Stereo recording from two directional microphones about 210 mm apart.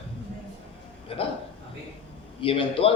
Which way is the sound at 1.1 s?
25° left (ahead or behind).